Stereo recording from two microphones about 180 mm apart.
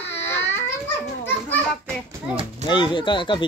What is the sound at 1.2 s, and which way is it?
Children playing, 5° left (ahead or behind).